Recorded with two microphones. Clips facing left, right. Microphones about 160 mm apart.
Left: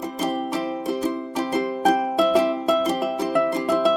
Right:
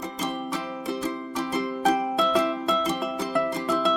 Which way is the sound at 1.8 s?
20° left (ahead or behind).